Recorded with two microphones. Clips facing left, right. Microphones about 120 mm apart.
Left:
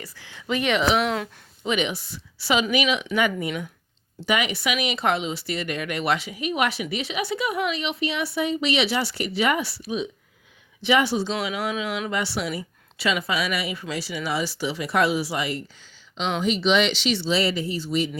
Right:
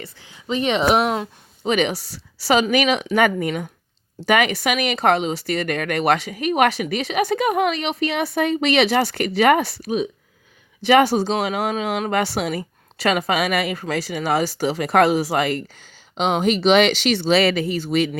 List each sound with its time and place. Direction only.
0.0 s speech: 25° right (ahead or behind)
0.9 s speech: 50° right (ahead or behind)